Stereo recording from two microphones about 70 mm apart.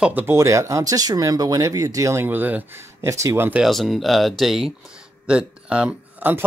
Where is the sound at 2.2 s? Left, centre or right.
Right.